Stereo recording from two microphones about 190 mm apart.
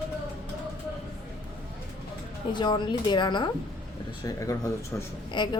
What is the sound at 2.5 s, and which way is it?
A woman's voice, 25° left (ahead or behind).